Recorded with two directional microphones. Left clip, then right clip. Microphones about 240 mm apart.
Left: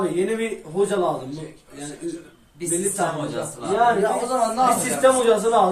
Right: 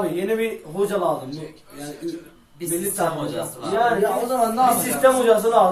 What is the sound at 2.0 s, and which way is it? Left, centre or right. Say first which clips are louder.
Speech: right 1 dB; right.